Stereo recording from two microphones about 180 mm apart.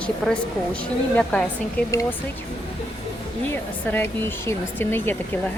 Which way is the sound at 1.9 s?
20° left (ahead or behind).